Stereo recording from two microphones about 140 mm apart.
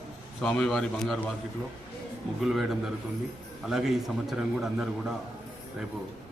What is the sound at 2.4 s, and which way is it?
A man's voice, centre (ahead or behind).